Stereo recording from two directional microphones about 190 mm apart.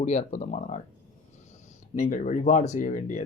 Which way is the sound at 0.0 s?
35° left (ahead or behind).